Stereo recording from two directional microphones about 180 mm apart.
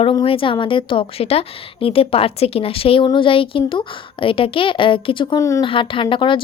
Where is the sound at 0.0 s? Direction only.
30° left (ahead or behind).